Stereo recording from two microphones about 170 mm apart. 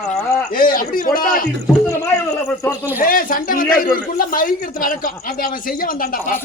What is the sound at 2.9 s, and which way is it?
A man's voice, 55° left (ahead or behind).